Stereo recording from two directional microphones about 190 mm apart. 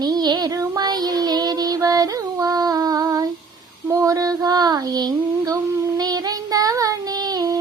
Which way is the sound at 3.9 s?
15° right (ahead or behind).